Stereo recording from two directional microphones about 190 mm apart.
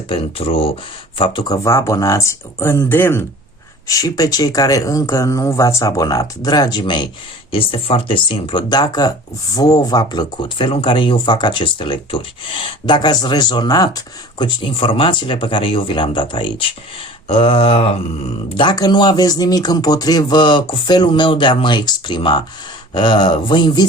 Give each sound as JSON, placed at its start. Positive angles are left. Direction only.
{"t": 0.1, "sound": "speech", "side_deg": 30}
{"t": 1.6, "sound": "speech", "side_deg": 15}